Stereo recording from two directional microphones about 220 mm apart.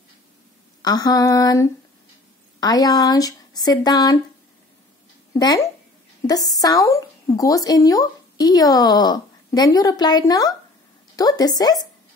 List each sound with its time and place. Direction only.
0.8 s speech: 15° left (ahead or behind)
5.3 s speech: 15° left (ahead or behind)